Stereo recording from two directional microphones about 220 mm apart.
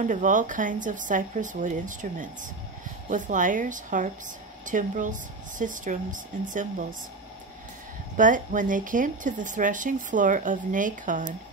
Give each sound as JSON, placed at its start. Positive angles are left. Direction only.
{"t": 0.0, "sound": "speech", "side_deg": -35}
{"t": 8.2, "sound": "speech", "side_deg": -35}